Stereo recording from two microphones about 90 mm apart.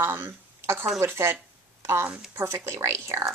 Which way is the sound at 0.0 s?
25° right (ahead or behind).